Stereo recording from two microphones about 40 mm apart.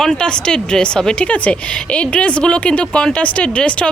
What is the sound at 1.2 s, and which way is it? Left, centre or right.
Speech, left.